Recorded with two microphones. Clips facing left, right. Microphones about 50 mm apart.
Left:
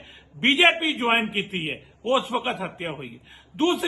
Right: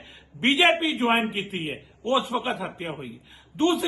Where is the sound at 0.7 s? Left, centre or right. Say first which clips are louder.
Even; left.